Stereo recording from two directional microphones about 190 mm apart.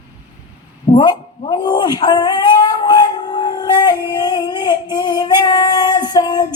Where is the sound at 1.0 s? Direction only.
20° left (ahead or behind).